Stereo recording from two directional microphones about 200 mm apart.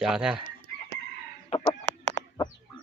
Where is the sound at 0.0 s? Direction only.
5° right (ahead or behind).